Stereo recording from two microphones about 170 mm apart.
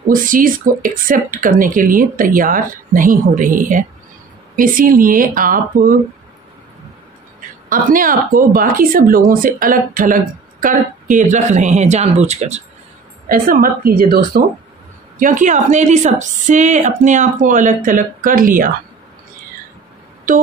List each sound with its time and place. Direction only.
0.1 s speech: 55° right (ahead or behind)
7.7 s speech: 55° right (ahead or behind)
13.3 s speech: 55° right (ahead or behind)
15.1 s speech: 50° right (ahead or behind)